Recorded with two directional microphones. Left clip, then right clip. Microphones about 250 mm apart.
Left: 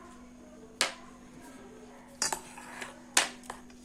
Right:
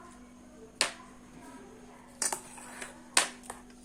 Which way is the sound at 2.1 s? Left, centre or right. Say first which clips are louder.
Left 2 dB; centre.